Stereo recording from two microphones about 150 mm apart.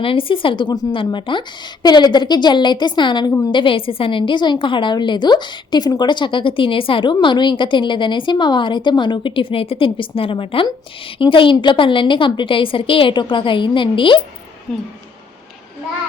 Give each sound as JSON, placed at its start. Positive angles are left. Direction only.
{"t": 0.0, "sound": "a woman's voice", "side_deg": 35}